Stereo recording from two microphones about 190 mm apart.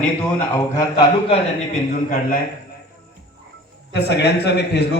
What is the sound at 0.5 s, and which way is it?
Speech, 20° left (ahead or behind).